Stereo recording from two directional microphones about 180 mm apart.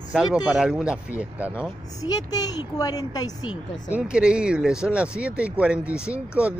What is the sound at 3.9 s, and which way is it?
Speech, 5° right (ahead or behind).